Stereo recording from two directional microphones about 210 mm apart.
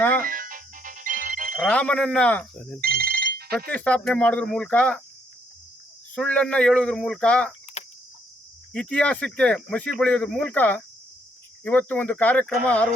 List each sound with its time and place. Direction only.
0.2 s ringtone: 40° right (ahead or behind)
1.5 s speech: 5° left (ahead or behind)
2.8 s ringtone: 45° right (ahead or behind)
3.7 s speech: 5° left (ahead or behind)
6.1 s speech: 5° left (ahead or behind)
7.8 s cricket: 30° left (ahead or behind)
8.7 s speech: 5° left (ahead or behind)